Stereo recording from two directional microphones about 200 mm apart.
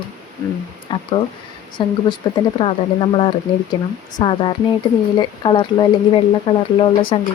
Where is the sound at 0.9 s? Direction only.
25° left (ahead or behind).